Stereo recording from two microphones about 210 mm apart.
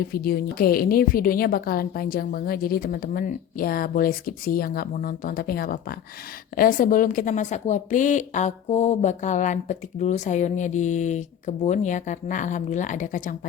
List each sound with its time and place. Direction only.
0.0 s a woman's voice: 45° left (ahead or behind)